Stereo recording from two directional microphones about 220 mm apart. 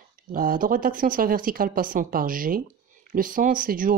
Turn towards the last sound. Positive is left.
turn(degrees=-40)  # may be behind; listen again after turning